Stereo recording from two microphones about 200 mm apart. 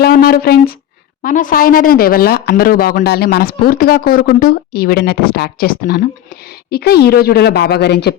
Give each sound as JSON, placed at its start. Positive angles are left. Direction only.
{"t": 0.0, "sound": "speech", "side_deg": 50}